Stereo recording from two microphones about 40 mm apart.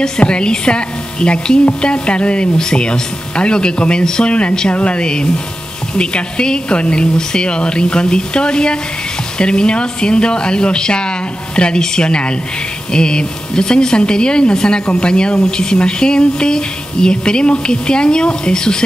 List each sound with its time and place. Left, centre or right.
0.2 s speech: left